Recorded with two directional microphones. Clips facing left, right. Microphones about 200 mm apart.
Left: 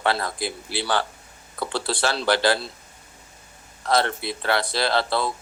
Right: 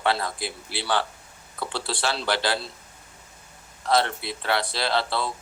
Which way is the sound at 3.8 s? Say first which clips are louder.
Left 1 dB; 45° left (ahead or behind).